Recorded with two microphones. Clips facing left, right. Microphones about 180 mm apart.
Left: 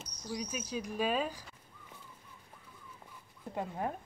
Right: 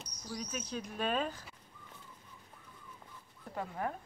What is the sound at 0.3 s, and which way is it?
Speech, 10° left (ahead or behind).